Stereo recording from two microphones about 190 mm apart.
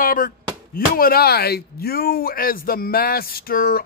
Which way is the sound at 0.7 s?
50° left (ahead or behind).